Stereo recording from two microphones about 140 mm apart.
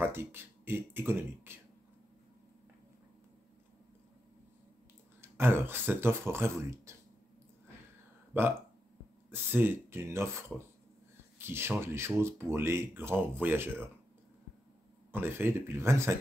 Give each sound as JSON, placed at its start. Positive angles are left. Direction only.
{"t": 0.0, "sound": "speech", "side_deg": -15}
{"t": 5.2, "sound": "speech", "side_deg": -15}
{"t": 6.9, "sound": "a sound", "side_deg": -20}
{"t": 8.3, "sound": "speech", "side_deg": -15}
{"t": 15.1, "sound": "speech", "side_deg": -15}